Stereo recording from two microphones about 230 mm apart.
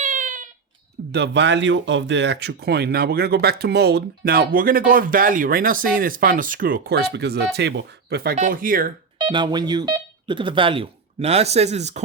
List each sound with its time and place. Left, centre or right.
0.0 s a sound: right
1.1 s speech: right
9.1 s speech: centre